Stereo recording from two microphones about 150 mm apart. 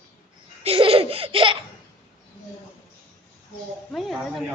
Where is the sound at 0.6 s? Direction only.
40° right (ahead or behind).